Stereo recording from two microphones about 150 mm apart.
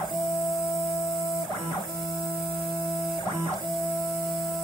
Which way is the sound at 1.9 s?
Centre (ahead or behind).